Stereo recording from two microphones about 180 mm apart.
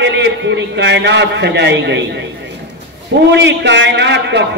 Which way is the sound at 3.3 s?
75° right (ahead or behind).